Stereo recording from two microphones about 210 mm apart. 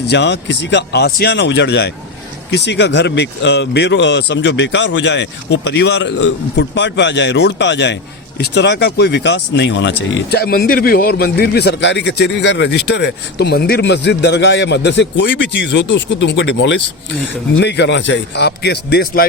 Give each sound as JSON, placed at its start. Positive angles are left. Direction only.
{"t": 0.1, "sound": "a man's voice", "side_deg": 55}